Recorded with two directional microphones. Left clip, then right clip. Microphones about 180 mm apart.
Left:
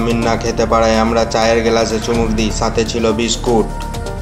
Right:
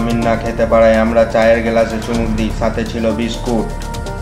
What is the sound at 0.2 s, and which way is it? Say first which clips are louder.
Speech: even; 40° left (ahead or behind).